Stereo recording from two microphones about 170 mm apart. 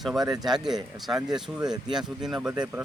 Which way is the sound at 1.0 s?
5° right (ahead or behind).